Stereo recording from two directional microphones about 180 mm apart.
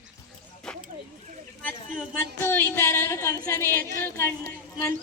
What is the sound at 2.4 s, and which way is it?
Speech, 10° left (ahead or behind).